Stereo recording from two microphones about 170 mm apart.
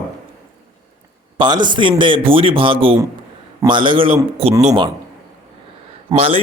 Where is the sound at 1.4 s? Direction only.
25° right (ahead or behind).